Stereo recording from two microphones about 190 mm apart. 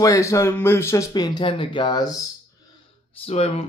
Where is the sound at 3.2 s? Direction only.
30° left (ahead or behind).